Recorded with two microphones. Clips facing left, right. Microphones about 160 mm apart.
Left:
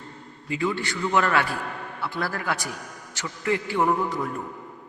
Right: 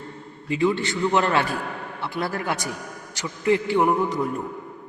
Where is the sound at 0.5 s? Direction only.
20° right (ahead or behind).